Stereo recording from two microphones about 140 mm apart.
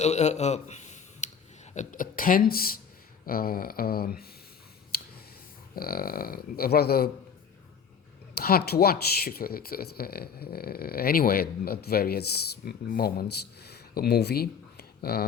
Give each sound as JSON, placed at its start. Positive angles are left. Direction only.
{"t": 0.0, "sound": "speech", "side_deg": 55}
{"t": 4.9, "sound": "a sound", "side_deg": 90}
{"t": 5.7, "sound": "speech", "side_deg": 90}
{"t": 8.4, "sound": "speech", "side_deg": 90}